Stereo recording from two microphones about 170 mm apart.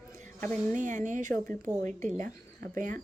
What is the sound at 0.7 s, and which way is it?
Speech, 45° right (ahead or behind).